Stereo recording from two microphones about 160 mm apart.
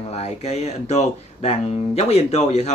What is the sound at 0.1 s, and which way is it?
Speech, 40° left (ahead or behind).